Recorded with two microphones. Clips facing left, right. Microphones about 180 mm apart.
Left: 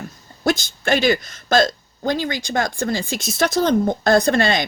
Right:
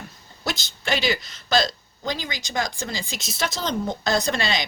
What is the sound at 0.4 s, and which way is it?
A woman's voice, 50° left (ahead or behind).